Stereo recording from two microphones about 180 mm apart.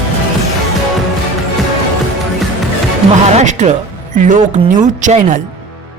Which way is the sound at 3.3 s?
40° right (ahead or behind).